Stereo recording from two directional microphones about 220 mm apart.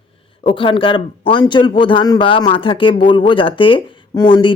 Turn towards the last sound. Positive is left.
turn(degrees=20)  # may be behind; listen again after turning